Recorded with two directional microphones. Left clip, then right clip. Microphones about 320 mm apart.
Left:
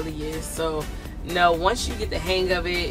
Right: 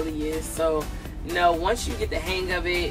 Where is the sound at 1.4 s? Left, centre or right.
Centre.